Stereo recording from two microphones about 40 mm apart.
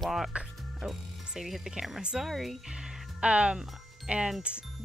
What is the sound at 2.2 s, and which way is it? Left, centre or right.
Speech, centre.